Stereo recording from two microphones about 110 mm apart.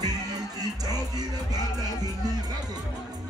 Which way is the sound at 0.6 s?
35° right (ahead or behind).